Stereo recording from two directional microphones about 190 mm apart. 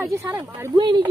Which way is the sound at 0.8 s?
25° right (ahead or behind).